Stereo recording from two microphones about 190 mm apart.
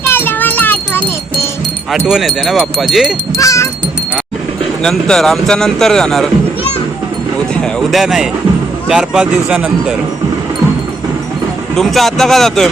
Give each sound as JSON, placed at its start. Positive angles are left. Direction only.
{"t": 0.0, "sound": "wind chime", "side_deg": 10}
{"t": 1.9, "sound": "speech", "side_deg": 0}
{"t": 3.3, "sound": "a sound", "side_deg": 15}
{"t": 4.8, "sound": "speech", "side_deg": 5}
{"t": 7.5, "sound": "speech", "side_deg": 5}
{"t": 11.8, "sound": "speech", "side_deg": 0}